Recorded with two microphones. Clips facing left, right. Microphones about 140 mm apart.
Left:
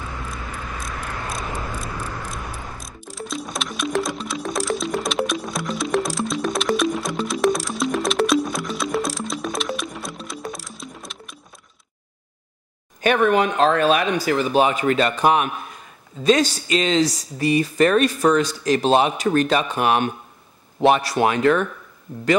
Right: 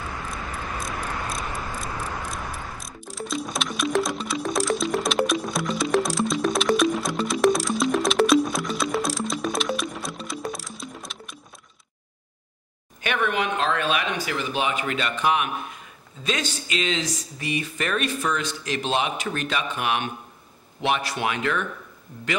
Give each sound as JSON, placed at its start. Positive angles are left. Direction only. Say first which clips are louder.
{"t": 2.3, "sound": "music", "louder": "even", "side_deg": 0}
{"t": 13.0, "sound": "speech", "louder": "left 8 dB", "side_deg": 40}